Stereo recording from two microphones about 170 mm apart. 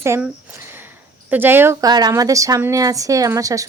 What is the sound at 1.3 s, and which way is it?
A woman's voice, 10° right (ahead or behind).